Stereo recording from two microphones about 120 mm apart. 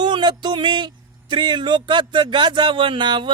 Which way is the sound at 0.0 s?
40° right (ahead or behind).